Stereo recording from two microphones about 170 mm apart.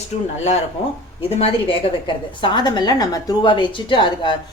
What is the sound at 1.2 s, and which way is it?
A woman's voice, 35° left (ahead or behind).